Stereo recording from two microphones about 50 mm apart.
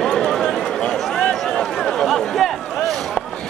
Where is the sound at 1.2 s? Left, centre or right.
Centre.